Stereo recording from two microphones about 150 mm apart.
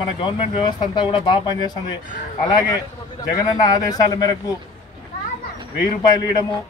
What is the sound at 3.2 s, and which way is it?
Speech, 25° left (ahead or behind).